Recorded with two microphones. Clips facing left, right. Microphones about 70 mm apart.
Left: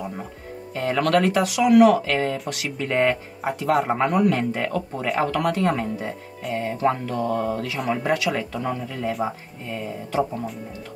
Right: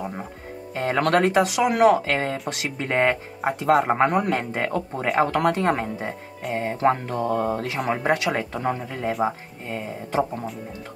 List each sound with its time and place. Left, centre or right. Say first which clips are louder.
0.7 s speech: even; right